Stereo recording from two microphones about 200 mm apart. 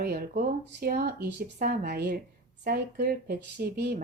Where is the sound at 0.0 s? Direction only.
50° right (ahead or behind).